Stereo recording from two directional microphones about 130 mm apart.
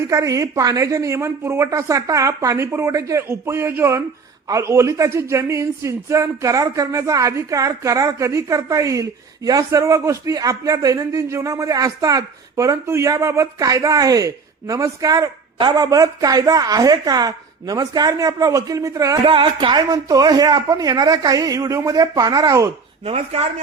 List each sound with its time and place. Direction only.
0.1 s speech: 25° right (ahead or behind)
19.2 s speech: 40° right (ahead or behind)
23.0 s speech: 50° right (ahead or behind)